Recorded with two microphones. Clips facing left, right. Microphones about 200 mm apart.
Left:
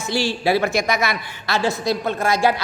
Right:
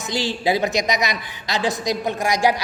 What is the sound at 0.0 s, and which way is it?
A woman's voice, 20° right (ahead or behind).